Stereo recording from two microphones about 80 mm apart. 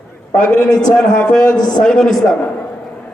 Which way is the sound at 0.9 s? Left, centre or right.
Centre.